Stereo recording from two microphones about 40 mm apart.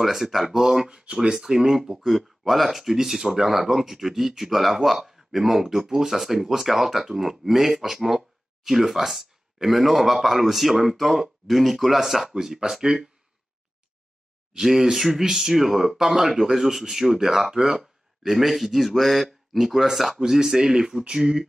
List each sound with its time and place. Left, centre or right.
0.0 s speech: centre
14.6 s speech: centre
20.2 s speech: centre